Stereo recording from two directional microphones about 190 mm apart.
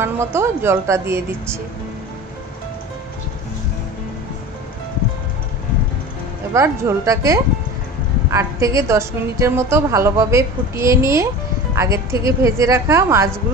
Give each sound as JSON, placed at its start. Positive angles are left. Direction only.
{"t": 0.0, "sound": "a woman's voice", "side_deg": -15}
{"t": 6.5, "sound": "a woman's voice", "side_deg": -15}